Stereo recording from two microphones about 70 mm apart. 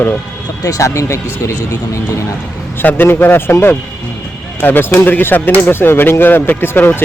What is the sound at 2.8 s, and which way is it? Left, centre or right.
Speech, left.